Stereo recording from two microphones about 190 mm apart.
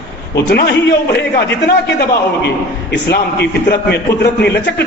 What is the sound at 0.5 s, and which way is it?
Speech, 60° left (ahead or behind).